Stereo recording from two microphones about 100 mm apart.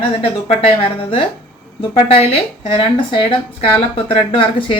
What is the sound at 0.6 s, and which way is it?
Speech, 75° left (ahead or behind).